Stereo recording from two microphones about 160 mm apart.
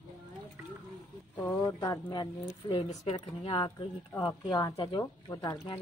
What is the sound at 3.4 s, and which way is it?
Speech, 30° left (ahead or behind).